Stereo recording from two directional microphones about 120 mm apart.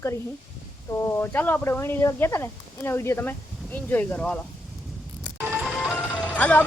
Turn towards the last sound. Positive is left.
turn(degrees=10)  # may be behind; listen again after turning